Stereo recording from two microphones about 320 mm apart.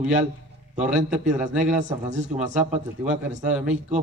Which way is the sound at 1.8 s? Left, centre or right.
Right.